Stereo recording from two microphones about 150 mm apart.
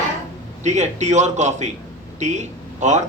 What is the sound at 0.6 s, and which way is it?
Speech, 50° right (ahead or behind).